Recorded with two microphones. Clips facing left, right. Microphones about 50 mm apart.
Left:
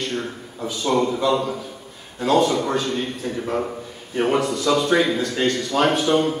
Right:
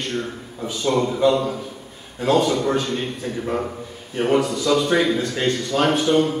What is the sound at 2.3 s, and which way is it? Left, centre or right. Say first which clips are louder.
A man's voice: left 1 dB; centre.